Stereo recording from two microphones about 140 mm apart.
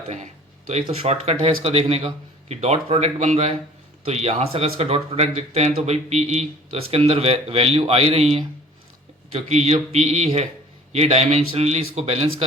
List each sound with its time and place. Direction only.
0.7 s speech: 50° right (ahead or behind)